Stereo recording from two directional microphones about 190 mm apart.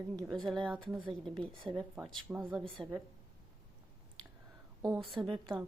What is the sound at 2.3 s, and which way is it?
Speech, 10° right (ahead or behind).